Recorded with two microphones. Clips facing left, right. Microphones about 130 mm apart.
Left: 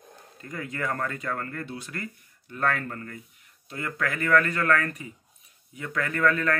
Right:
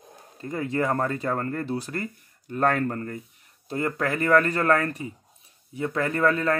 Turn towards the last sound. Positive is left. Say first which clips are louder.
# right 2 dB
turn(degrees=-30)  # may be behind; listen again after turning